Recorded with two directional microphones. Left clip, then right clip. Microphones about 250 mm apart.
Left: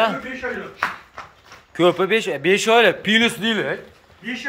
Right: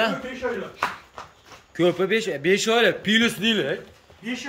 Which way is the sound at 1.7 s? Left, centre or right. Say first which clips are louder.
Left 4 dB; centre.